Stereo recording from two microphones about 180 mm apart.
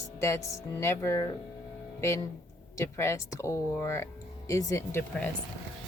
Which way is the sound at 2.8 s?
15° left (ahead or behind).